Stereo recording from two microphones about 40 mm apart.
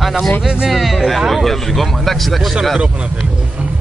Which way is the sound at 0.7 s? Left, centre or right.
Centre.